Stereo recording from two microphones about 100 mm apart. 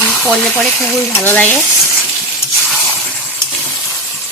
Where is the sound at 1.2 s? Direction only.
20° left (ahead or behind).